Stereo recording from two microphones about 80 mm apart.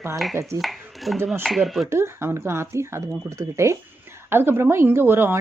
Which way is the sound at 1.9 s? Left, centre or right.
Right.